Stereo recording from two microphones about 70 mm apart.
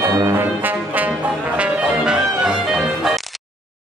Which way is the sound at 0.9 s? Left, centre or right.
Centre.